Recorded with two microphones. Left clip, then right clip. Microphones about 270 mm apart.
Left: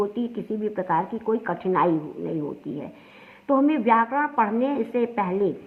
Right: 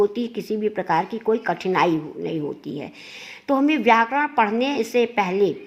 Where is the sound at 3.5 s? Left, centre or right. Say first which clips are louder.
Right 2 dB; right.